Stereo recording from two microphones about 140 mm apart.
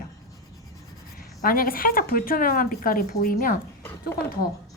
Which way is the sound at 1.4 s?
90° left.